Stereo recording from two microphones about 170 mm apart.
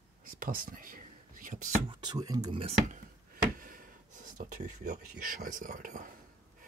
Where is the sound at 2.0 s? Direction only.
20° right (ahead or behind).